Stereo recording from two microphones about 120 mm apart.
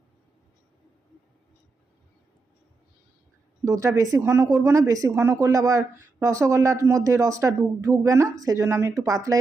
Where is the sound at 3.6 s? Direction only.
25° right (ahead or behind).